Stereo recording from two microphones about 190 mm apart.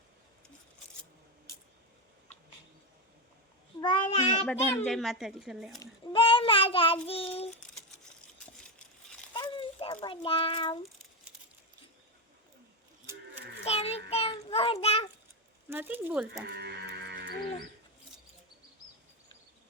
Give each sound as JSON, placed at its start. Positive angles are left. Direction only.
{"t": 3.8, "sound": "child singing", "side_deg": 25}
{"t": 4.9, "sound": "speech", "side_deg": 0}
{"t": 5.8, "sound": "child singing", "side_deg": 25}
{"t": 7.6, "sound": "crumpling", "side_deg": 5}
{"t": 9.3, "sound": "a sound", "side_deg": 25}
{"t": 13.7, "sound": "child singing", "side_deg": 35}
{"t": 15.7, "sound": "speech", "side_deg": -10}
{"t": 16.6, "sound": "moo", "side_deg": -60}